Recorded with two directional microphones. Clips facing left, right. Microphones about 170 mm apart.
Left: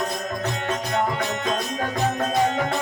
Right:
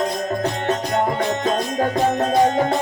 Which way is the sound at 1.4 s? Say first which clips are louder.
Right 5 dB; 40° right (ahead or behind).